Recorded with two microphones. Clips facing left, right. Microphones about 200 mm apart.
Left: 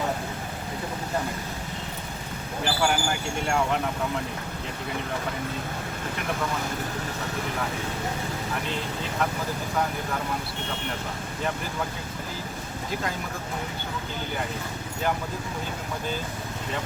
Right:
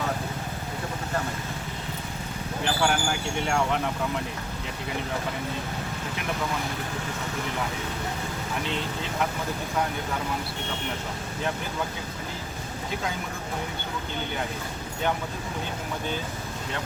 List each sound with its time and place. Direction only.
2.6 s speech: 5° left (ahead or behind)